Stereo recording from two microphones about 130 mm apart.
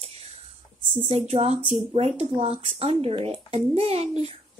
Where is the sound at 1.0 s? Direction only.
50° right (ahead or behind).